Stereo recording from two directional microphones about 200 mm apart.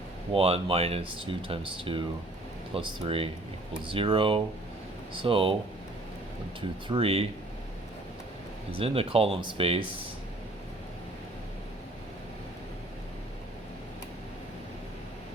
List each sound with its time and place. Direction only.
0.3 s speech: 30° right (ahead or behind)
6.6 s speech: 25° right (ahead or behind)
8.8 s speech: 30° right (ahead or behind)